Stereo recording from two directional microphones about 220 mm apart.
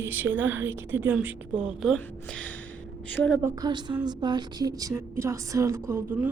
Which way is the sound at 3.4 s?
20° right (ahead or behind).